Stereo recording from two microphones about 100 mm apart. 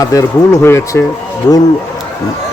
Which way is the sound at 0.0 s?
30° left (ahead or behind).